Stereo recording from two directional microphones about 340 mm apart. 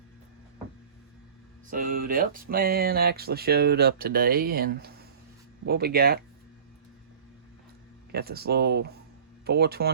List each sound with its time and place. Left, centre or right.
1.7 s speech: right
8.1 s speech: right